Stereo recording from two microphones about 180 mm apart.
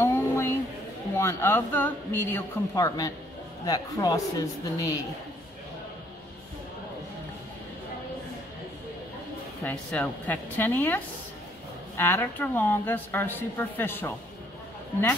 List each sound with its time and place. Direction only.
0.0 s a sound: 15° left (ahead or behind)
1.1 s a woman's voice: 15° left (ahead or behind)
9.6 s speech: 10° left (ahead or behind)
12.0 s speech: 10° left (ahead or behind)